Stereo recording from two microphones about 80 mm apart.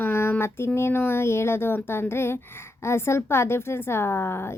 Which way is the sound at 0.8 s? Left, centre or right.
Left.